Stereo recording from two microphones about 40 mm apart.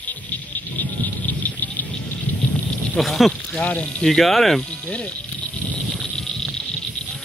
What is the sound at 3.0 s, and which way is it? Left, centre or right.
Speech, centre.